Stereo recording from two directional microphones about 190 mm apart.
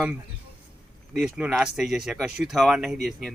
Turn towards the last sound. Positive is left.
turn(degrees=0)  # may be behind; listen again after turning